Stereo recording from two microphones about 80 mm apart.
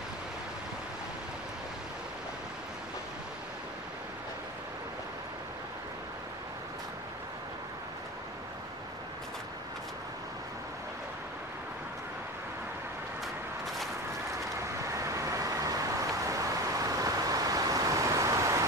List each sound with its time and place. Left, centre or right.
14.6 s vehicle: right